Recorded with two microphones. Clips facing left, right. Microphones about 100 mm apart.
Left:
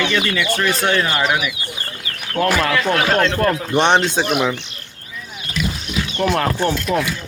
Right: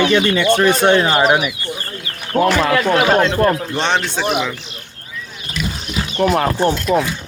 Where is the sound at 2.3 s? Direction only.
10° right (ahead or behind).